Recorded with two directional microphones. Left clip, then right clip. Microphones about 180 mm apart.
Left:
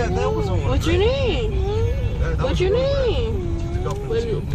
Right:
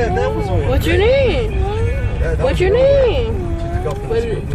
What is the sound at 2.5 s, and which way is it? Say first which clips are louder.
Speech: right 8 dB; 30° left (ahead or behind).